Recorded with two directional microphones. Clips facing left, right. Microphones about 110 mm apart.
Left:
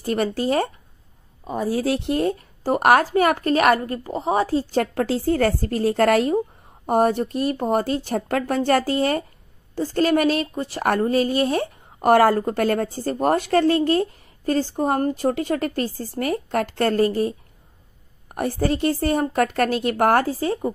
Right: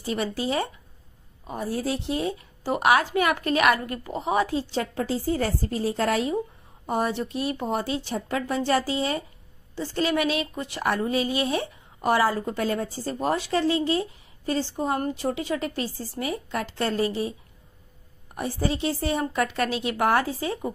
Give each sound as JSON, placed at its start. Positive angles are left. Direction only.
{"t": 0.0, "sound": "a woman's voice", "side_deg": 50}
{"t": 1.7, "sound": "a woman's voice", "side_deg": 80}
{"t": 4.9, "sound": "a woman's voice", "side_deg": 70}